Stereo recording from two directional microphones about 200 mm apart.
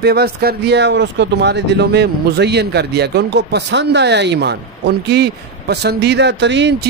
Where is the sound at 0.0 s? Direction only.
55° right (ahead or behind).